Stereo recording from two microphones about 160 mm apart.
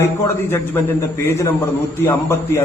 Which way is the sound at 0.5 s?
15° left (ahead or behind).